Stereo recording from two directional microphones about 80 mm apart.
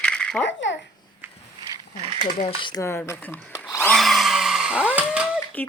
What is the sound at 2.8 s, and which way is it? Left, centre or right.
Speech, left.